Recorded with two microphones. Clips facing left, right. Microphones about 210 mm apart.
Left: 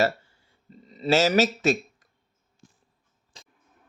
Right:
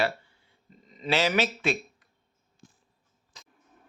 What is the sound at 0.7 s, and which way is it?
Speech, 35° left (ahead or behind).